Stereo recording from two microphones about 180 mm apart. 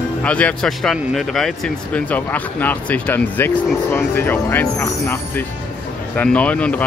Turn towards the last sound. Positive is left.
turn(degrees=5)  # may be behind; listen again after turning